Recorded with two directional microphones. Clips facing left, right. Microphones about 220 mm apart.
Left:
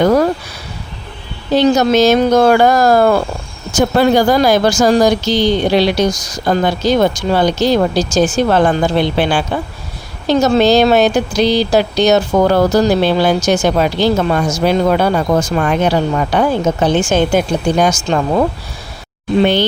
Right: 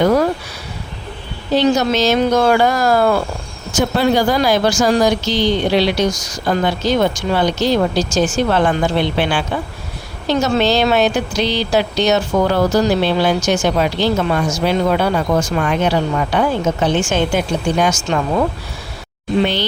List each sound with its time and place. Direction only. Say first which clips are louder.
1.5 s speech: left 4 dB; 45° left (ahead or behind)